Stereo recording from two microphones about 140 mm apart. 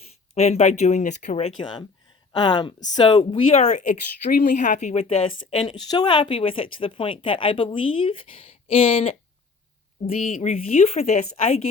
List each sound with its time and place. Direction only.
0.3 s speech: 50° left (ahead or behind)
2.3 s speech: 30° left (ahead or behind)
3.2 s speech: 45° left (ahead or behind)
5.6 s speech: 30° left (ahead or behind); by 11.2 s 50° left (ahead or behind)